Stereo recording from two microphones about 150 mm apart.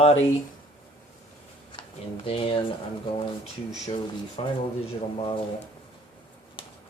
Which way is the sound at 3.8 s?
45° left (ahead or behind).